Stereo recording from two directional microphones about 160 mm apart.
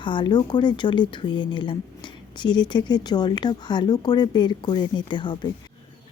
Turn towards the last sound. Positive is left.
turn(degrees=30)  # may be behind; listen again after turning